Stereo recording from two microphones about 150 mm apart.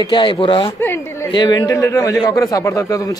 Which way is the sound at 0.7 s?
15° left (ahead or behind).